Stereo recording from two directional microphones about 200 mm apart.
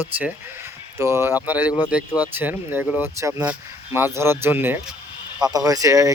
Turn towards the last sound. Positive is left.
turn(degrees=-15)  # may be behind; listen again after turning